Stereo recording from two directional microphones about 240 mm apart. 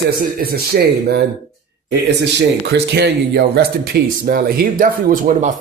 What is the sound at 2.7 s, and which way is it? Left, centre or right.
Speech, right.